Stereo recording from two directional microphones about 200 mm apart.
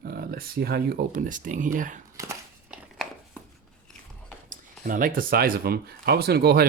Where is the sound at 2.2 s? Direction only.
15° right (ahead or behind).